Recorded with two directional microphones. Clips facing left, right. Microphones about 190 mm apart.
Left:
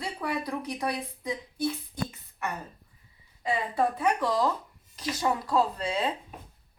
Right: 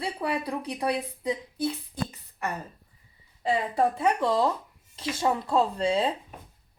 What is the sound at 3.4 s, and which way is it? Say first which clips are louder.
A woman's voice: right 3 dB; 30° right (ahead or behind).